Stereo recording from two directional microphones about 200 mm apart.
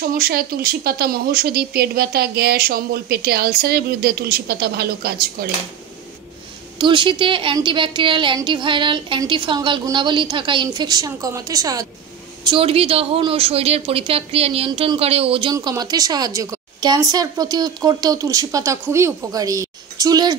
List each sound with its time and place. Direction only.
0.0 s speech: 45° right (ahead or behind)
6.8 s a woman's voice: 25° right (ahead or behind)
12.4 s a woman's voice: 30° right (ahead or behind)